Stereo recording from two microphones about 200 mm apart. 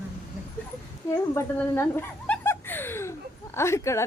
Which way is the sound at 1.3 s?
15° left (ahead or behind).